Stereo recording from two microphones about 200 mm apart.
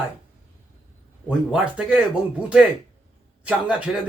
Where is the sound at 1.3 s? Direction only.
5° right (ahead or behind).